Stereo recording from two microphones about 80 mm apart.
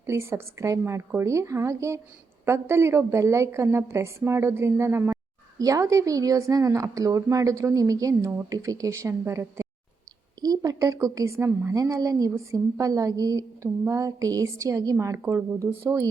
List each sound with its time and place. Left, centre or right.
0.0 s a woman's voice: right
5.5 s a woman's voice: right
10.4 s a woman's voice: right
11.3 s a woman's voice: right
11.7 s a woman's voice: right